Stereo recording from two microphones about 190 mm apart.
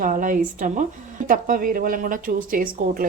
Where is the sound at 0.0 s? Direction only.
45° right (ahead or behind).